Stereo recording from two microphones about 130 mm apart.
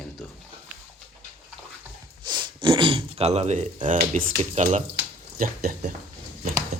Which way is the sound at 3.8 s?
75° right (ahead or behind).